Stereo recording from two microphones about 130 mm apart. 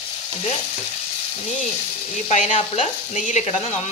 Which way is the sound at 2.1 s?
65° left (ahead or behind).